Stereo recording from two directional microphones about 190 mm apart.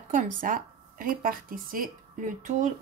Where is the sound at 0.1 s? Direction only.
45° right (ahead or behind).